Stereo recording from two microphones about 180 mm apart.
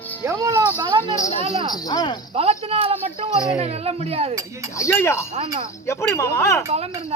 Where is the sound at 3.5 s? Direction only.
35° right (ahead or behind).